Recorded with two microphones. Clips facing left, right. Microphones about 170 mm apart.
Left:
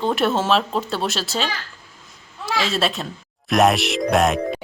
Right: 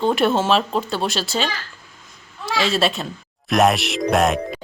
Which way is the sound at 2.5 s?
Centre (ahead or behind).